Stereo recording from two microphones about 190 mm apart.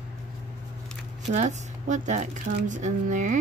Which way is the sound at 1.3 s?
40° right (ahead or behind).